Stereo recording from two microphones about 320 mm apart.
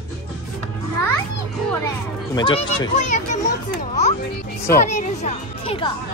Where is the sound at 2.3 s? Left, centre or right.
Centre.